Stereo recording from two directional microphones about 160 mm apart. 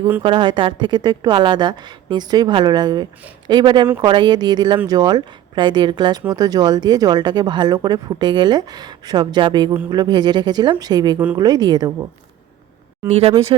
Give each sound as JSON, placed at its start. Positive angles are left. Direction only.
{"t": 0.2, "sound": "speech", "side_deg": -30}
{"t": 13.1, "sound": "speech", "side_deg": -40}